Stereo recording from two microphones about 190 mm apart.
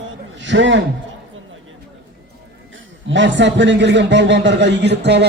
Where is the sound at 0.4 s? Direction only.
70° right (ahead or behind).